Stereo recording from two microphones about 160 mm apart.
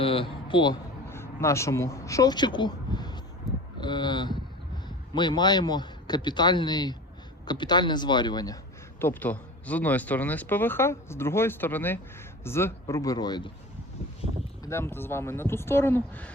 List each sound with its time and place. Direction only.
0.0 s speech: 35° left (ahead or behind)
1.1 s speech: 15° left (ahead or behind)
9.0 s speech: 10° left (ahead or behind)
14.6 s speech: 15° left (ahead or behind)